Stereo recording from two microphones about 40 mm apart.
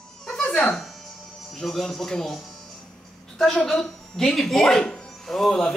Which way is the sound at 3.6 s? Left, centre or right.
Centre.